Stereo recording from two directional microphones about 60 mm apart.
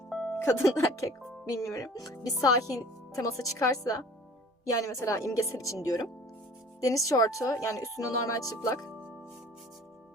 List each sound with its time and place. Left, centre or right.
0.1 s music: centre
0.4 s speech: left
0.8 s speech: left
1.7 s speech: left
3.2 s speech: left
4.8 s speech: left